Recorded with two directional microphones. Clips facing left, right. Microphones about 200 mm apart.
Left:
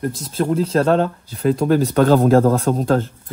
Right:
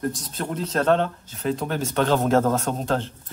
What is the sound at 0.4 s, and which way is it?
Speech, 30° left (ahead or behind).